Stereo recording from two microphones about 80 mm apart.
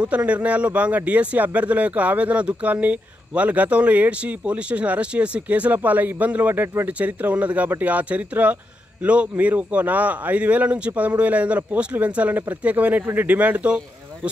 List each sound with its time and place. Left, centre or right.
0.0 s a man's voice: centre